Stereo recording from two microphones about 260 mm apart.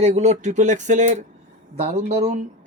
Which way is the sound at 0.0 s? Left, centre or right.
Right.